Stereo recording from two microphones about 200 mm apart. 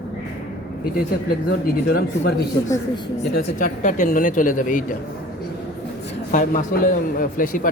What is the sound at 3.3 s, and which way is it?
Speech, 40° left (ahead or behind).